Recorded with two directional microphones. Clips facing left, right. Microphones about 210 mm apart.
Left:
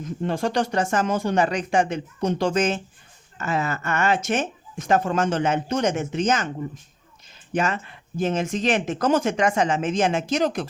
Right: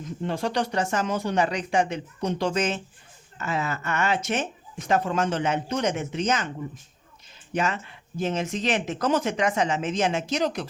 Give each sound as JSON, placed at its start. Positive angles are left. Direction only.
{"t": 0.2, "sound": "speech", "side_deg": 50}
{"t": 7.5, "sound": "speech", "side_deg": 50}